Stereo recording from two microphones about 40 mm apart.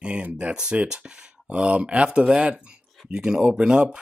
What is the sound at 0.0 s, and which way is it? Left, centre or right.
Speech, right.